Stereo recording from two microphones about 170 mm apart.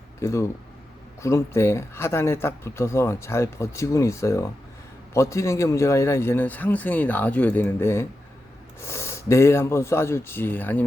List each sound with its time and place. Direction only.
0.2 s speech: 15° left (ahead or behind)